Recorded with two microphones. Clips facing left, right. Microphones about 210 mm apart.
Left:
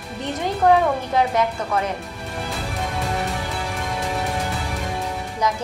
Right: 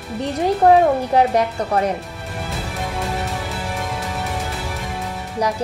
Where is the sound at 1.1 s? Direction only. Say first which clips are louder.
Right 3 dB; 35° right (ahead or behind).